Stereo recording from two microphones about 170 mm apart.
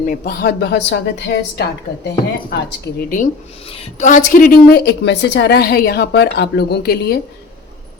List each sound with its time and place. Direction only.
0.1 s a woman's voice: 65° left (ahead or behind)
3.7 s a woman's voice: 35° left (ahead or behind)
4.1 s a woman's voice: 55° left (ahead or behind)